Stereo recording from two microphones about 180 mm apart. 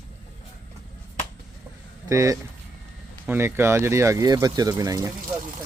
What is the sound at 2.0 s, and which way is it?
Speech, 20° right (ahead or behind).